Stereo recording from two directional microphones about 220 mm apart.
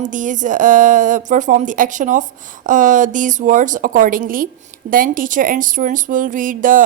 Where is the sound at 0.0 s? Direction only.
35° right (ahead or behind).